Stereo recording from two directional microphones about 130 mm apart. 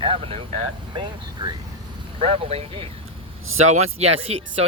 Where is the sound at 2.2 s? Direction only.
50° right (ahead or behind).